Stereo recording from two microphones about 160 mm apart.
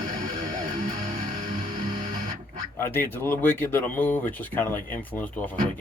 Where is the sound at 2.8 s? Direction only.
15° left (ahead or behind).